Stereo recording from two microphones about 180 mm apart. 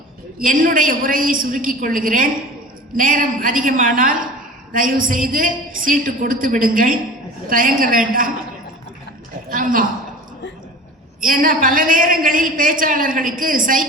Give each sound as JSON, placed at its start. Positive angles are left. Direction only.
{"t": 0.3, "sound": "a woman's voice", "side_deg": -50}
{"t": 9.5, "sound": "a woman's voice", "side_deg": -50}
{"t": 11.2, "sound": "a woman's voice", "side_deg": -50}